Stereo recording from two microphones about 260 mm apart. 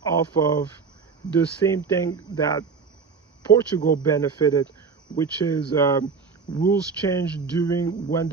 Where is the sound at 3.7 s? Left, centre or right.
Centre.